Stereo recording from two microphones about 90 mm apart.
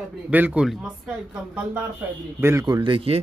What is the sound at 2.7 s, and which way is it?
Speech, 65° right (ahead or behind).